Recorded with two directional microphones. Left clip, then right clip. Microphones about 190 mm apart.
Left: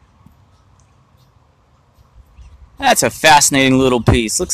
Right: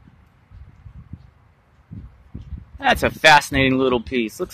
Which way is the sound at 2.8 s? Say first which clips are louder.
Left 4 dB; 15° left (ahead or behind).